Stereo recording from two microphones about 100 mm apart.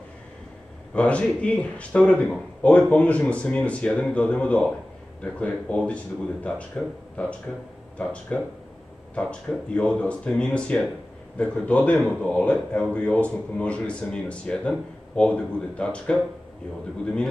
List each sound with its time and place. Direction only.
0.9 s a man's voice: 10° left (ahead or behind)